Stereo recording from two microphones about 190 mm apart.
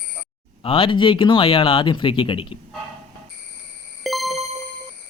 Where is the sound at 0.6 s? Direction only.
30° left (ahead or behind).